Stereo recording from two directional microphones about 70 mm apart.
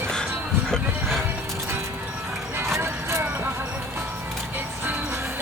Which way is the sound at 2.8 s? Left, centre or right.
Right.